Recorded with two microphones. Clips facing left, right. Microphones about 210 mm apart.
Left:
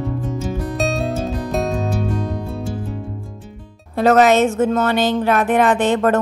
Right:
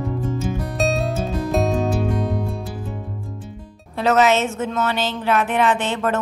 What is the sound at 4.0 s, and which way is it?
A woman's voice, 50° left (ahead or behind).